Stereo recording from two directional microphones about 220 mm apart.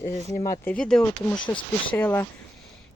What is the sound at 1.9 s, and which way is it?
Speech, 10° left (ahead or behind).